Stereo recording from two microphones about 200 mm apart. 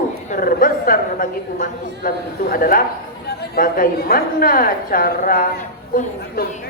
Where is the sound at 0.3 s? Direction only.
45° left (ahead or behind).